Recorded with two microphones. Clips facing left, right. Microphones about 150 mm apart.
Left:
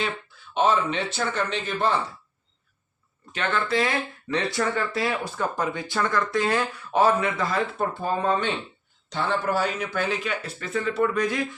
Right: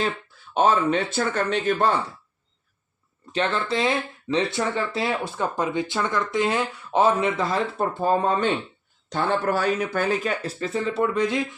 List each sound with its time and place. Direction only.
0.5 s speech: 45° right (ahead or behind)
3.3 s speech: 30° right (ahead or behind)
9.0 s speech: 50° right (ahead or behind); by 11.4 s 25° right (ahead or behind)